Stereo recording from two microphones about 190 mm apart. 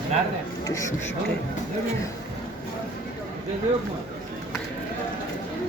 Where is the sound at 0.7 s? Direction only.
15° left (ahead or behind).